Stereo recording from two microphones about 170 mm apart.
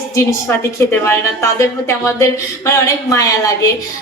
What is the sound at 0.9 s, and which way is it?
A woman's voice, 15° left (ahead or behind).